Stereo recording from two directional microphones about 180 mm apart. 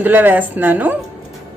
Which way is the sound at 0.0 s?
10° right (ahead or behind).